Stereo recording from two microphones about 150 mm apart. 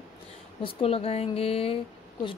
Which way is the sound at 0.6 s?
40° left (ahead or behind).